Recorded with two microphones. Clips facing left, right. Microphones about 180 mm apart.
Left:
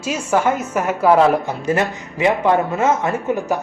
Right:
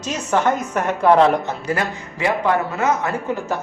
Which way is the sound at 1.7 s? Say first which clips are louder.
Left 6 dB; 25° left (ahead or behind).